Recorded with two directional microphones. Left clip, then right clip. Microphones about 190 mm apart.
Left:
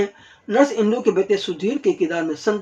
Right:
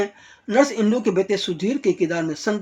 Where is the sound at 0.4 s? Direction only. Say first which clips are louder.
Left 1 dB; 30° right (ahead or behind).